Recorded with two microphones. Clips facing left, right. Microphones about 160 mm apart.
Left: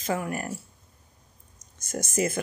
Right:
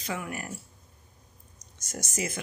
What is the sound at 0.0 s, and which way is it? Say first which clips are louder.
Speech: left 6 dB; 45° left (ahead or behind).